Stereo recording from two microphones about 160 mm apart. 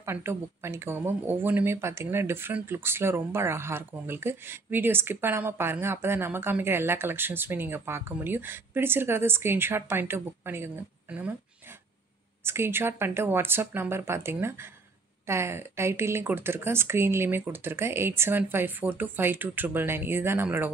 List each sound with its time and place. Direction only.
0.0 s speech: 15° right (ahead or behind)
12.4 s speech: 15° right (ahead or behind)